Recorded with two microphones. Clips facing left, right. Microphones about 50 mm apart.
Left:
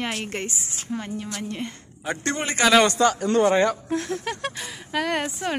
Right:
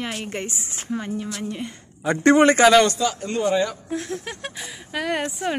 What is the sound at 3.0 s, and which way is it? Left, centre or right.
Speech, left.